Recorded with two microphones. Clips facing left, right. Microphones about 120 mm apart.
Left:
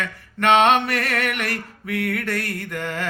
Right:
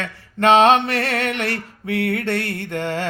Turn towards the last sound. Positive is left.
turn(degrees=-30)  # may be behind; listen again after turning